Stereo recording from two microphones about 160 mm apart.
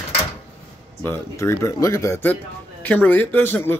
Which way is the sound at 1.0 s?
15° left (ahead or behind).